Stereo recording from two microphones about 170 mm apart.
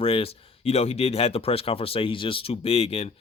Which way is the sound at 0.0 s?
35° left (ahead or behind).